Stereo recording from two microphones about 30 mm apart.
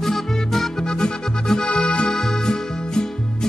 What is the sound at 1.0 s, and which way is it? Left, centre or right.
Music, left.